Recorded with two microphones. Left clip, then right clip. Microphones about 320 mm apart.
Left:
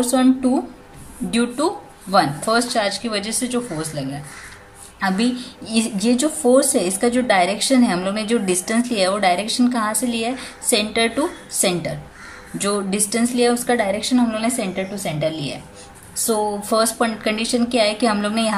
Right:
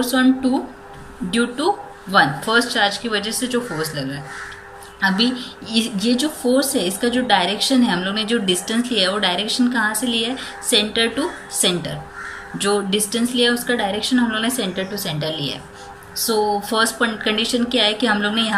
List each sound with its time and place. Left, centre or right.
0.0 s a woman's voice: centre